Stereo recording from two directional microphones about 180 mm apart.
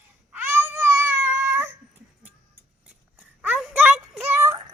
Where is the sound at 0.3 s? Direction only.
10° right (ahead or behind).